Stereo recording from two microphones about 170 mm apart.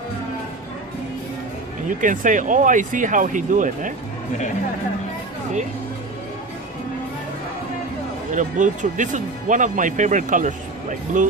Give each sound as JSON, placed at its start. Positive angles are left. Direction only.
{"t": 1.9, "sound": "speech", "side_deg": -50}
{"t": 8.3, "sound": "speech", "side_deg": -50}